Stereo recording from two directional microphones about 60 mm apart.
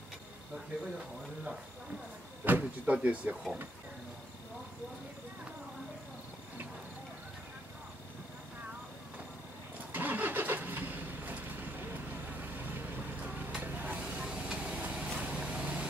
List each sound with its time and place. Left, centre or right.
0.9 s speech: centre
2.4 s speech: right
9.9 s vehicle: right
13.5 s a sound: right
14.0 s vehicle: centre